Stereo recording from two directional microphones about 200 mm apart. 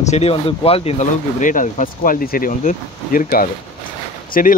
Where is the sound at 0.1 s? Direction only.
30° left (ahead or behind).